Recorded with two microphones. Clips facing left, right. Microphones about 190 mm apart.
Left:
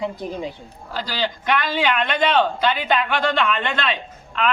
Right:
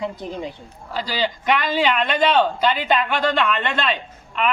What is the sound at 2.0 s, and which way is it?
A man's voice, 5° right (ahead or behind).